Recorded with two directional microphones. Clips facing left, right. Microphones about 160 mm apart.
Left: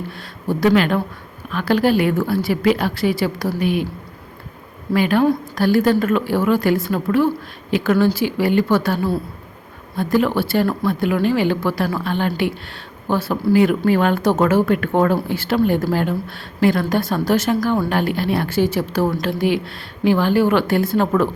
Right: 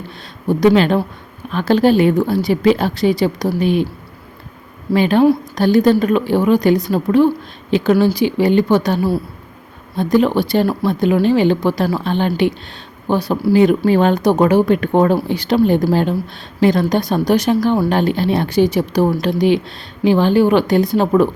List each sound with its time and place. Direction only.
0.4 s speech: 20° right (ahead or behind)
4.9 s speech: 25° right (ahead or behind)
10.0 s speech: 20° right (ahead or behind)